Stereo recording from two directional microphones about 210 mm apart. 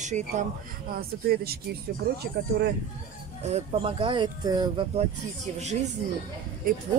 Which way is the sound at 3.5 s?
30° right (ahead or behind).